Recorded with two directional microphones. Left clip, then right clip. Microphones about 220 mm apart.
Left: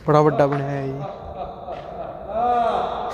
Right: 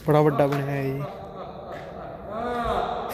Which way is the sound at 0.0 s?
Centre (ahead or behind).